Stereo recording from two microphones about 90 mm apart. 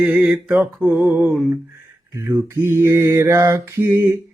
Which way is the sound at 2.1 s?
30° right (ahead or behind).